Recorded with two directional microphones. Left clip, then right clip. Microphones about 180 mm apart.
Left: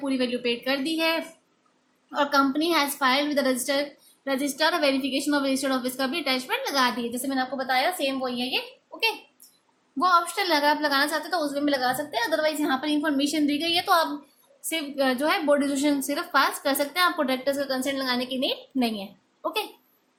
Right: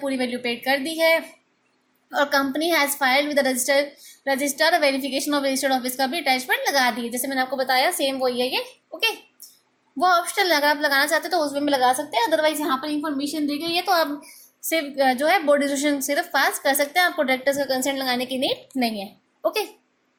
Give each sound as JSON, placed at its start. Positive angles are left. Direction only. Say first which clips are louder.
{"t": 0.0, "sound": "a woman's voice", "louder": "right 1 dB", "side_deg": -20}
{"t": 12.8, "sound": "a woman's voice", "louder": "left 1 dB", "side_deg": 15}
{"t": 13.7, "sound": "a woman's voice", "louder": "right 2 dB", "side_deg": -5}
{"t": 14.7, "sound": "a woman's voice", "louder": "right 5 dB", "side_deg": -15}